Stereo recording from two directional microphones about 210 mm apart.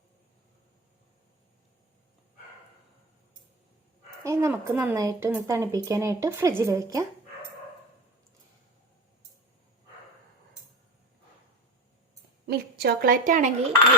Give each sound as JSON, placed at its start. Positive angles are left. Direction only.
{"t": 4.2, "sound": "speech", "side_deg": -15}
{"t": 12.5, "sound": "a woman's voice", "side_deg": -50}